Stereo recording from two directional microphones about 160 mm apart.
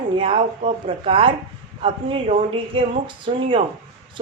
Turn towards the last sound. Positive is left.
turn(degrees=-35)  # may be behind; listen again after turning